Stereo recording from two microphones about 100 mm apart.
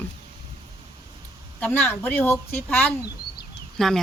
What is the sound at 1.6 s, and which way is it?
Speech, 20° left (ahead or behind).